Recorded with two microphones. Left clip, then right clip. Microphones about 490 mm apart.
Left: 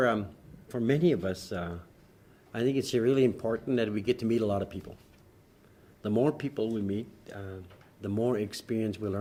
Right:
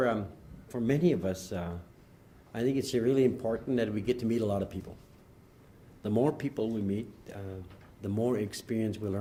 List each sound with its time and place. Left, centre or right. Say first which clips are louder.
0.0 s a sound: left 2 dB; left
0.7 s speech: left 2 dB; left
6.0 s speech: left 1 dB; left